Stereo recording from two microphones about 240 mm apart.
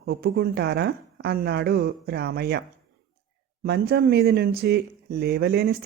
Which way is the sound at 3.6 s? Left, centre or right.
Right.